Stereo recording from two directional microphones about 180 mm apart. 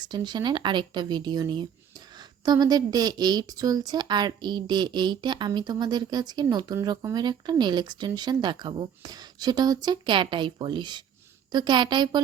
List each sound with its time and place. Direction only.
0.0 s a woman's voice: 25° right (ahead or behind)